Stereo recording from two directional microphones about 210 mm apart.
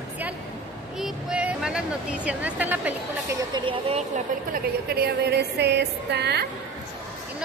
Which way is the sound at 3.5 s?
25° right (ahead or behind).